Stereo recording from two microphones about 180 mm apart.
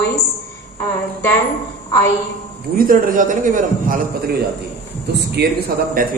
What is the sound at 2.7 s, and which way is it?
A man's voice, 50° right (ahead or behind).